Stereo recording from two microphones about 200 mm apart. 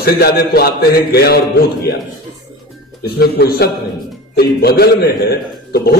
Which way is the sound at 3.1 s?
50° left (ahead or behind).